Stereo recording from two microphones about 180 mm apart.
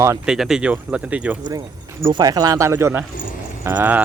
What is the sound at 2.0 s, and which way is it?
Speech, 25° right (ahead or behind).